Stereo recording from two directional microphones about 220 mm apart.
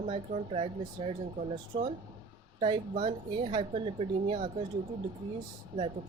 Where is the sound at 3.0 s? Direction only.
25° right (ahead or behind).